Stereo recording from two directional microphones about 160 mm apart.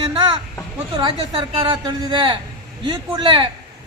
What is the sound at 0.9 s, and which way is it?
A man's voice, 30° right (ahead or behind).